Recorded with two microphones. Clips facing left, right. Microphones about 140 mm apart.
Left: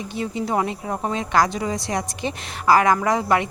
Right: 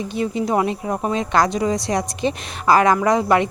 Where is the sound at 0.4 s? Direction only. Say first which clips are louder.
Right 2 dB; 20° right (ahead or behind).